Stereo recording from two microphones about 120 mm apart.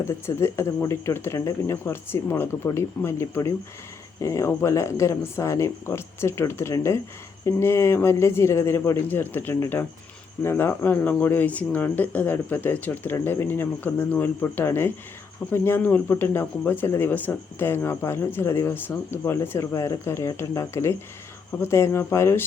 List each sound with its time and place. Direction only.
0.3 s speech: 20° left (ahead or behind)